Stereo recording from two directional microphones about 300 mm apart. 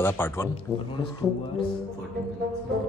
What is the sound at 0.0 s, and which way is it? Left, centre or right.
Speech, centre.